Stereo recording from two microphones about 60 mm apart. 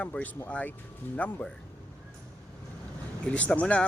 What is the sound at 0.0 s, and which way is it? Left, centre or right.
Speech, left.